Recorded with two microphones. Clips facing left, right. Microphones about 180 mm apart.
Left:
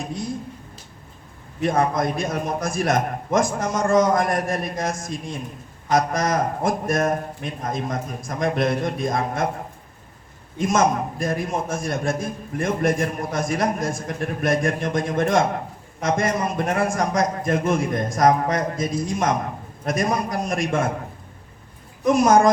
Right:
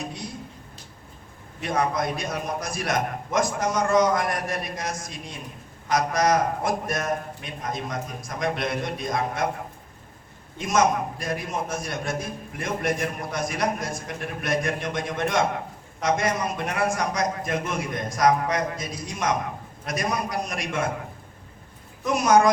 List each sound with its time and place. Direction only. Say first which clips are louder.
1.6 s a man's voice: left 4 dB; 50° left (ahead or behind)
10.6 s a man's voice: left 2 dB; 50° left (ahead or behind)
22.0 s a man's voice: left 5 dB; 50° left (ahead or behind)